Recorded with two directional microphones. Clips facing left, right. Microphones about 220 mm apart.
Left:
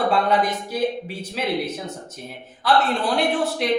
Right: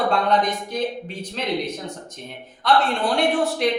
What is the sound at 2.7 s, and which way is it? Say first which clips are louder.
A woman's voice: even; 5° left (ahead or behind).